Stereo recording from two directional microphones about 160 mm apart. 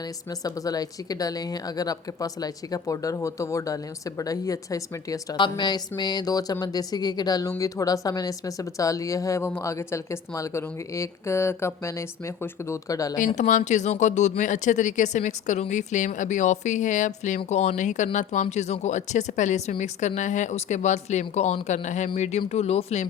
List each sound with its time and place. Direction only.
0.3 s speech: 20° left (ahead or behind)
13.1 s speech: 50° left (ahead or behind)